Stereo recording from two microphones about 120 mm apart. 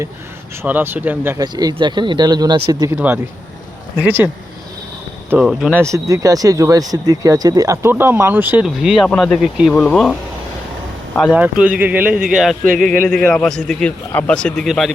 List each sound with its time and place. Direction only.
0.6 s speech: 15° right (ahead or behind)
1.4 s speech: 35° right (ahead or behind)
2.9 s speech: 15° right (ahead or behind)
5.4 s speech: 5° right (ahead or behind)
5.9 s speech: 25° right (ahead or behind); by 9.7 s 5° right (ahead or behind)
9.7 s speech: 5° left (ahead or behind)
11.3 s speech: 10° right (ahead or behind)